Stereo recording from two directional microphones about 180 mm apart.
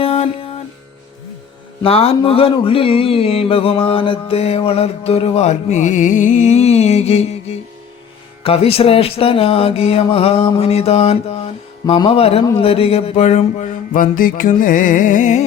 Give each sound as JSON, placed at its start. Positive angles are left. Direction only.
{"t": 0.0, "sound": "music", "side_deg": 35}
{"t": 1.8, "sound": "mantra", "side_deg": 35}